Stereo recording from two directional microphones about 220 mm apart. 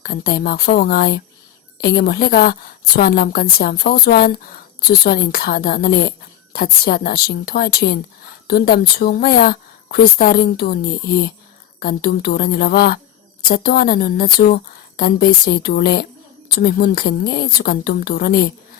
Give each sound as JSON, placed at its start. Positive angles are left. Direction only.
{"t": 0.0, "sound": "a woman's voice", "side_deg": 40}